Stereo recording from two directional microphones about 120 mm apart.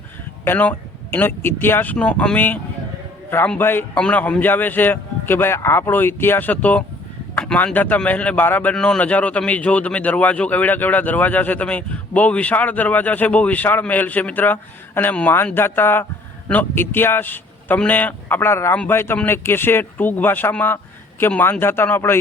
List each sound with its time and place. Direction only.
0.4 s a man's voice: 15° left (ahead or behind)